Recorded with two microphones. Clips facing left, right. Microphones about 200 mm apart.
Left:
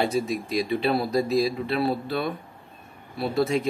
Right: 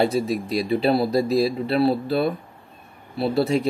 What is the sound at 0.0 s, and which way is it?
Speech, 35° right (ahead or behind).